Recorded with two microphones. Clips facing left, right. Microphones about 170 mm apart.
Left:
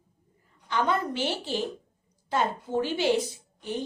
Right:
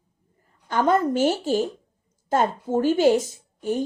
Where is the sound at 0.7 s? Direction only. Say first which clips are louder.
Right 7 dB; 45° right (ahead or behind).